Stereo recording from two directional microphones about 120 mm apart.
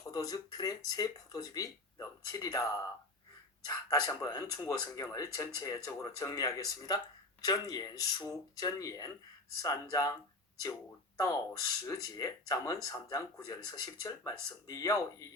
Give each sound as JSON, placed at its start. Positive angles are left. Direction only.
{"t": 0.0, "sound": "speech", "side_deg": 30}
{"t": 11.9, "sound": "speech", "side_deg": 30}